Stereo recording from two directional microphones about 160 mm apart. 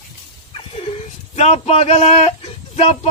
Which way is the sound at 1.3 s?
40° left (ahead or behind).